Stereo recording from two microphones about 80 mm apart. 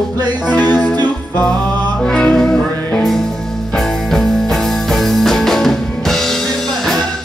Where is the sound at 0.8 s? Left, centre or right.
Centre.